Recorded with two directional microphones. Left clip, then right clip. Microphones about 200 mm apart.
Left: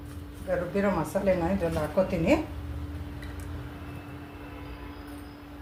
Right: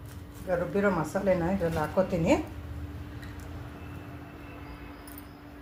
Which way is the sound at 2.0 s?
25° right (ahead or behind).